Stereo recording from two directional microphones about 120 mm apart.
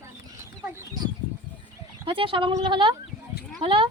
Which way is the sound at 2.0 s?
45° right (ahead or behind).